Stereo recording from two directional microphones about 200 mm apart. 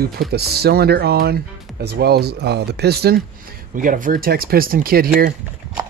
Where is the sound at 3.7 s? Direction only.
45° right (ahead or behind).